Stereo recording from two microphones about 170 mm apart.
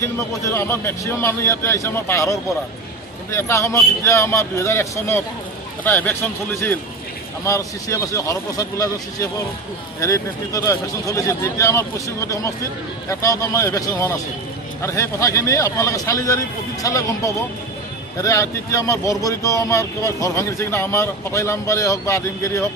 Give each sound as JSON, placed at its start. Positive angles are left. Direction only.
{"t": 0.0, "sound": "a man's voice", "side_deg": 15}